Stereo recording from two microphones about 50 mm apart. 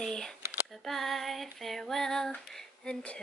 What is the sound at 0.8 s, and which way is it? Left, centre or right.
Speech, centre.